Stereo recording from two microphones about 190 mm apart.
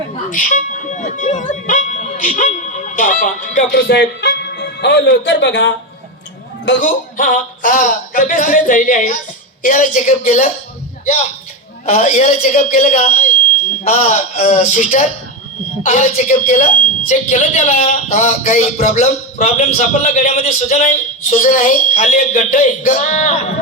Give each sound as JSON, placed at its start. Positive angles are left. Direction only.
{"t": 0.3, "sound": "speech", "side_deg": 45}
{"t": 3.7, "sound": "speech", "side_deg": 60}
{"t": 6.8, "sound": "a man's voice", "side_deg": 45}
{"t": 11.9, "sound": "a man's voice", "side_deg": 40}